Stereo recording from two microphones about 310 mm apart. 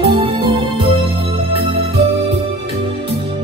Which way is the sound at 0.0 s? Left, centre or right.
Centre.